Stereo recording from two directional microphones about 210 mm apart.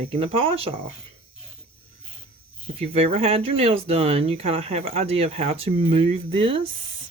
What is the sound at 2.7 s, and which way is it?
Speech, 30° right (ahead or behind).